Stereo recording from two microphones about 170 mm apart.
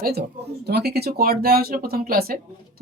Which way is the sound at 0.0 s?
70° right (ahead or behind).